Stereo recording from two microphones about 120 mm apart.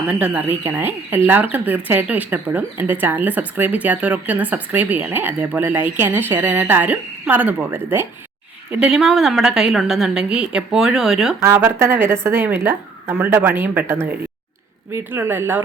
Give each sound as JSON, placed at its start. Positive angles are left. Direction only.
{"t": 0.1, "sound": "speech", "side_deg": -10}
{"t": 8.9, "sound": "a woman's voice", "side_deg": -5}
{"t": 11.4, "sound": "speech", "side_deg": -20}